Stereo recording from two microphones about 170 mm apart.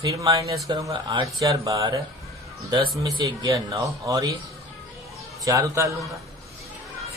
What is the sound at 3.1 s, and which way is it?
Speech, 20° right (ahead or behind).